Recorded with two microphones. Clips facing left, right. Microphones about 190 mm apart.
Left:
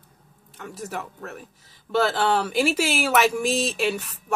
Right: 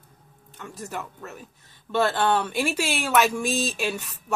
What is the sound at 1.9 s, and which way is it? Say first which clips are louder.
Speech: left 1 dB; 20° left (ahead or behind).